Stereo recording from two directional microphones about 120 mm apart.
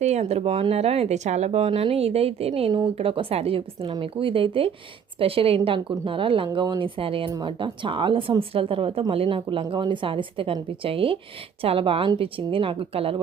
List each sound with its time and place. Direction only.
0.0 s a woman's voice: 65° right (ahead or behind); by 7.3 s 50° right (ahead or behind)
7.3 s speech: 30° right (ahead or behind)
7.6 s a woman's voice: 45° right (ahead or behind)